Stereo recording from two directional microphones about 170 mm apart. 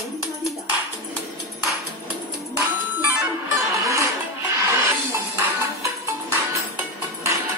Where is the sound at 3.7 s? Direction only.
15° right (ahead or behind).